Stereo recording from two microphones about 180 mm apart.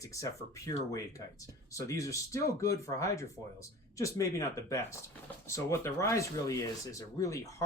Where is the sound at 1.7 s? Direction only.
20° left (ahead or behind).